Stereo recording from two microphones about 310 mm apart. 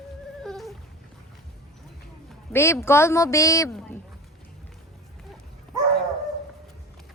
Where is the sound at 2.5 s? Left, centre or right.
Centre.